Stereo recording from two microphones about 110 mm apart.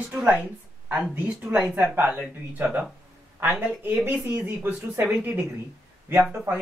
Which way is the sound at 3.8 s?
15° right (ahead or behind).